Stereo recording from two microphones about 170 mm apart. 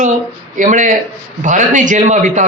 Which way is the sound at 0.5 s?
50° right (ahead or behind).